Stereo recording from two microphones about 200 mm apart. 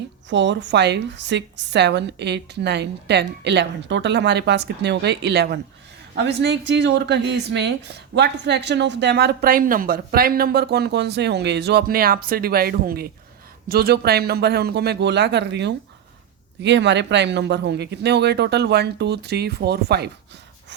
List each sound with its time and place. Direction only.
0.3 s speech: 65° right (ahead or behind)